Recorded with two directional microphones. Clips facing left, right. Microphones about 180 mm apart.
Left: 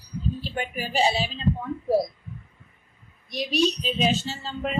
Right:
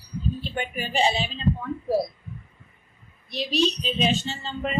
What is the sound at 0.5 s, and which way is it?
Speech, 5° left (ahead or behind).